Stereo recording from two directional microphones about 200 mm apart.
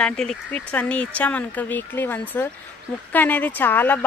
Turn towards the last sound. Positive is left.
turn(degrees=10)  # may be behind; listen again after turning